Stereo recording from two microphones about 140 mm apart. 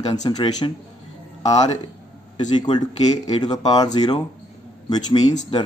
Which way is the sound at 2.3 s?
30° left (ahead or behind).